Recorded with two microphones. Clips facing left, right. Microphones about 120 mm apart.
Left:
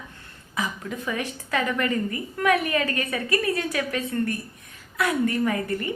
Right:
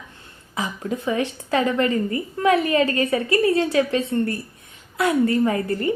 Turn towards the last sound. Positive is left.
turn(degrees=-30)  # may be behind; listen again after turning